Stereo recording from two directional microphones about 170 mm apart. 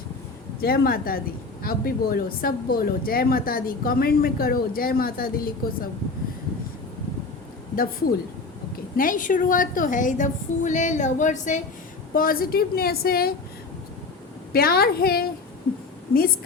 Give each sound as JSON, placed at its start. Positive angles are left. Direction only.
{"t": 0.6, "sound": "speech", "side_deg": 60}
{"t": 7.8, "sound": "a woman's voice", "side_deg": 60}
{"t": 12.1, "sound": "speech", "side_deg": 60}
{"t": 14.5, "sound": "speech", "side_deg": 65}